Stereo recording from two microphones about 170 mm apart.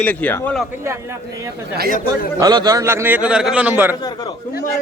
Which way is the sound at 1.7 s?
60° right (ahead or behind).